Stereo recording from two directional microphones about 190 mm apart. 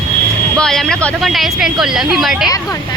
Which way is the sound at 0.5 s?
5° left (ahead or behind).